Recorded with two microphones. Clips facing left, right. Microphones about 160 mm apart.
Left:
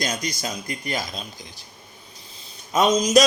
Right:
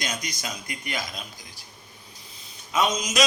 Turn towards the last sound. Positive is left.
turn(degrees=35)  # may be behind; listen again after turning